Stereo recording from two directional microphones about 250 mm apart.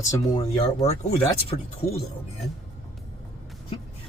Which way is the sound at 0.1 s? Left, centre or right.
Left.